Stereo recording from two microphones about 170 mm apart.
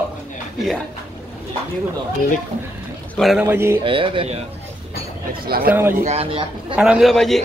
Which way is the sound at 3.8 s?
30° right (ahead or behind).